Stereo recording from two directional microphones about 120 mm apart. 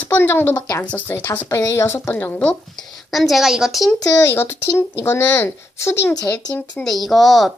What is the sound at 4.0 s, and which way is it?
Speech, 25° left (ahead or behind).